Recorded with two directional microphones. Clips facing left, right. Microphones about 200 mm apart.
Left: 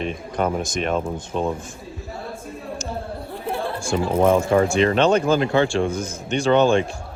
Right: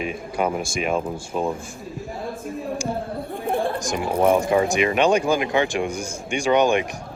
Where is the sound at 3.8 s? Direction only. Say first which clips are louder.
Left 2 dB; 15° right (ahead or behind).